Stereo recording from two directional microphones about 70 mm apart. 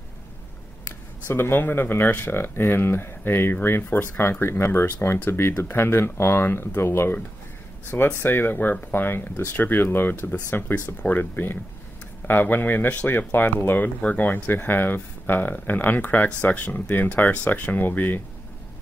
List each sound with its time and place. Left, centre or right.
1.3 s speech: left